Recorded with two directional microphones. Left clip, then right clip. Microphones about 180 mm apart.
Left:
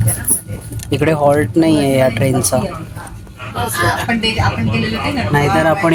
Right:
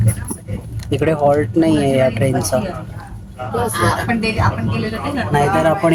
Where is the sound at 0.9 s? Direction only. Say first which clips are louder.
Left 2 dB; 5° left (ahead or behind).